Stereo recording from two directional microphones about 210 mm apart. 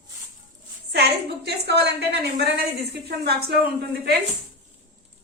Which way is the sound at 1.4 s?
50° right (ahead or behind).